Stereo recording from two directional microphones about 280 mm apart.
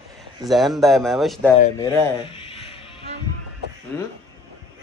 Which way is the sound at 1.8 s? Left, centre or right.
Centre.